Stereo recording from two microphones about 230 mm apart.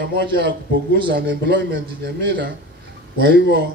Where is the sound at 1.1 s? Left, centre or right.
Right.